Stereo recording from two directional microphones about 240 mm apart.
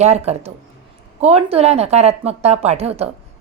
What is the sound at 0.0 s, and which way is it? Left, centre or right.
A woman's voice, right.